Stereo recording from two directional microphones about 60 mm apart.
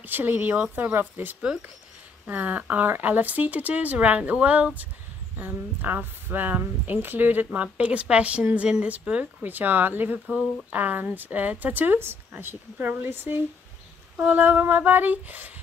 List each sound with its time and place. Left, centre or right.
0.0 s speech: right